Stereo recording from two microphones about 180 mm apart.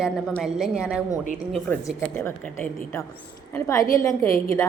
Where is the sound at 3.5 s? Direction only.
15° left (ahead or behind).